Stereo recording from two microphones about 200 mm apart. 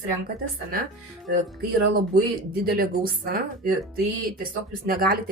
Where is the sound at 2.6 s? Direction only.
50° right (ahead or behind).